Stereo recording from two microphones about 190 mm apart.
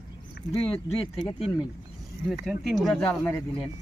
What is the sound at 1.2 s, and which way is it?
Speech, 20° left (ahead or behind).